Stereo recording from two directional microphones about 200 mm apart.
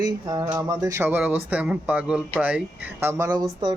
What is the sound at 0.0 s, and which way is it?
Speech, 15° right (ahead or behind).